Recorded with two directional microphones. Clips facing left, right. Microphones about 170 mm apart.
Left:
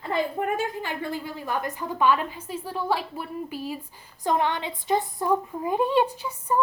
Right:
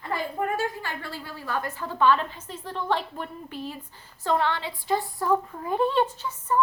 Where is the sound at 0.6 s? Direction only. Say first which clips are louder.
Left 2 dB; 15° left (ahead or behind).